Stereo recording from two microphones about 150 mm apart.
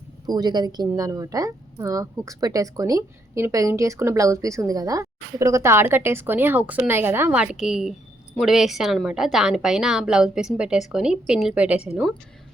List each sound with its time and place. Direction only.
0.3 s a woman's voice: 25° right (ahead or behind); by 12.1 s 5° right (ahead or behind)